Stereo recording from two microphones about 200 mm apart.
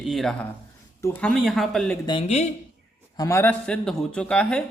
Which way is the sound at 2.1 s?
30° left (ahead or behind).